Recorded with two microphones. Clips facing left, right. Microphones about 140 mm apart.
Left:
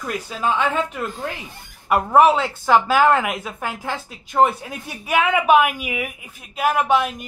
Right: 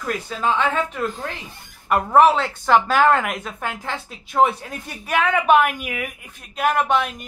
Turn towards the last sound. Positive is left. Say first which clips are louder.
# left 2 dB
turn(degrees=5)  # may be behind; listen again after turning